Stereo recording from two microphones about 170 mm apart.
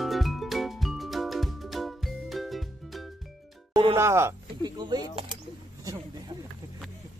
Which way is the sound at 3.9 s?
15° right (ahead or behind).